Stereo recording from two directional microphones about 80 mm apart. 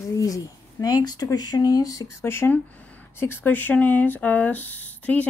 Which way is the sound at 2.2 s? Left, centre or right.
Left.